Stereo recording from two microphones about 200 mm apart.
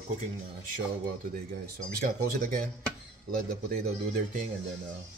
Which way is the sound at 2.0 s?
45° right (ahead or behind).